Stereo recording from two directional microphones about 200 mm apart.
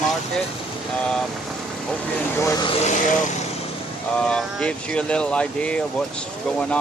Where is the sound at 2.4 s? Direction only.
15° left (ahead or behind).